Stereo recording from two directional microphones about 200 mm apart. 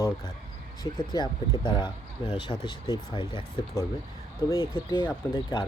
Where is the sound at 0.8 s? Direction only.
20° left (ahead or behind).